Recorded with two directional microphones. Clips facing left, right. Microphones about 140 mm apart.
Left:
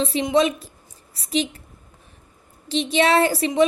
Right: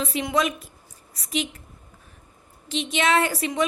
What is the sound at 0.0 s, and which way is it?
A woman's voice, 25° left (ahead or behind).